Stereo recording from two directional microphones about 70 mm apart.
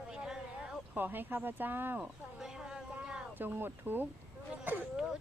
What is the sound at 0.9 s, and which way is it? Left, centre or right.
A woman's voice, right.